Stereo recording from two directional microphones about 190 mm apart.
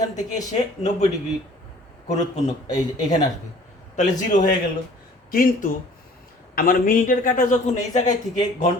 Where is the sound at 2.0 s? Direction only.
35° left (ahead or behind).